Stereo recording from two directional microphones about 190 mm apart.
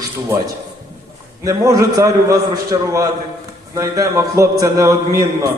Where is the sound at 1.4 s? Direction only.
15° right (ahead or behind).